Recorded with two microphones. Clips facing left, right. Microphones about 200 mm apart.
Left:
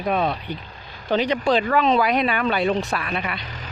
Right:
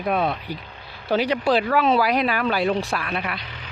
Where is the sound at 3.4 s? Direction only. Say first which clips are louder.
Left 3 dB; 45° left (ahead or behind).